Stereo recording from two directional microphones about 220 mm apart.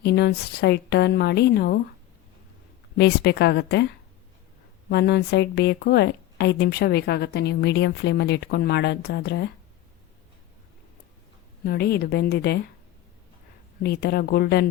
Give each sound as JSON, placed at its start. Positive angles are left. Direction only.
{"t": 0.0, "sound": "a woman's voice", "side_deg": 50}
{"t": 3.0, "sound": "a woman's voice", "side_deg": 50}
{"t": 4.9, "sound": "a woman's voice", "side_deg": 50}
{"t": 11.6, "sound": "a woman's voice", "side_deg": 45}
{"t": 13.8, "sound": "a woman's voice", "side_deg": 45}